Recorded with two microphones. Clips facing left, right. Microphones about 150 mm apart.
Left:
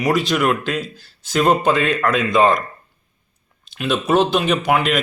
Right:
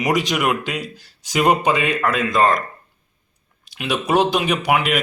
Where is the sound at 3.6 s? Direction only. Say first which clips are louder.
Left 2 dB; 10° right (ahead or behind).